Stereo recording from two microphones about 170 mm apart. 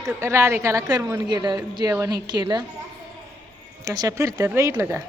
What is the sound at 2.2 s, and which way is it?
Speech, 25° right (ahead or behind).